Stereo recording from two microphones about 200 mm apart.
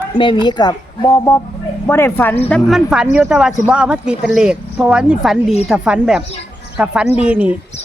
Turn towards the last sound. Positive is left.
turn(degrees=-5)  # may be behind; listen again after turning